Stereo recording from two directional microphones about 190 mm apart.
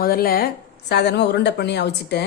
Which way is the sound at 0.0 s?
50° left (ahead or behind).